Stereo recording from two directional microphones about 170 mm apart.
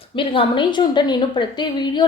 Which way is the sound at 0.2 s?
30° left (ahead or behind).